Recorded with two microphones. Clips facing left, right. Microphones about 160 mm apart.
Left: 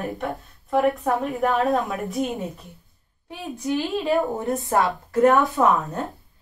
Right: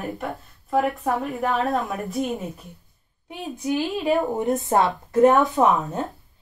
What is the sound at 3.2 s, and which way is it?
A woman's voice, 15° right (ahead or behind).